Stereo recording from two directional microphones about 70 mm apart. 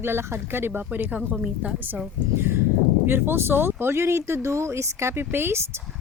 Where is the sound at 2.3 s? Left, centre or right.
Right.